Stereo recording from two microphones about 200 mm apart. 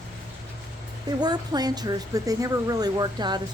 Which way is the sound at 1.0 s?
20° right (ahead or behind).